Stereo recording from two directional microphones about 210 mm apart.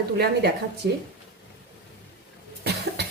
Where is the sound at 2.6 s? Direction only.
50° right (ahead or behind).